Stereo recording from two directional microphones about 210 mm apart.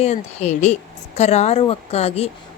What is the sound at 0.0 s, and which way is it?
A woman's voice, 30° left (ahead or behind).